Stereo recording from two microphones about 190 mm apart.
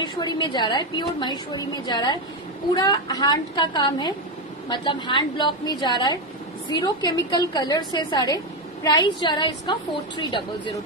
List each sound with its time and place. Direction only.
0.0 s a woman's voice: 25° left (ahead or behind)